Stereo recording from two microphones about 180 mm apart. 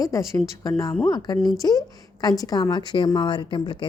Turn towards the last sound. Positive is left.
turn(degrees=25)  # may be behind; listen again after turning